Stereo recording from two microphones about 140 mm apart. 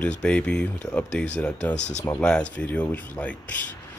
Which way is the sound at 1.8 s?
55° left (ahead or behind).